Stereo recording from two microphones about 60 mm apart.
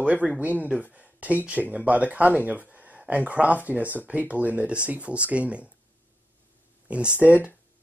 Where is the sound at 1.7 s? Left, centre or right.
Right.